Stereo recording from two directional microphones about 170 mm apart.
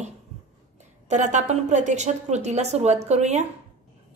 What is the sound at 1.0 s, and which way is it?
A woman's voice, 45° right (ahead or behind).